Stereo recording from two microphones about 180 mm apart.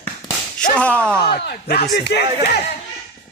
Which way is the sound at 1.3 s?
65° left (ahead or behind).